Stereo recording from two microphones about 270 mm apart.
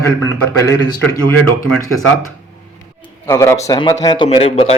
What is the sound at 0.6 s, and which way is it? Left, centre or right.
Speech, centre.